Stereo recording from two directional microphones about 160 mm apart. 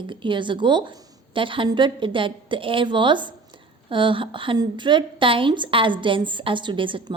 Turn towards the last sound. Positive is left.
turn(degrees=-30)  # may be behind; listen again after turning